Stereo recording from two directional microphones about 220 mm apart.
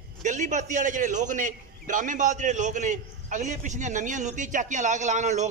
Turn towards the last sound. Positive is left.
turn(degrees=-35)  # may be behind; listen again after turning